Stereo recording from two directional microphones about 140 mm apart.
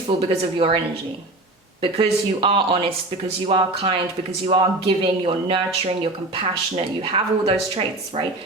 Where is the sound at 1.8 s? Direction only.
40° right (ahead or behind).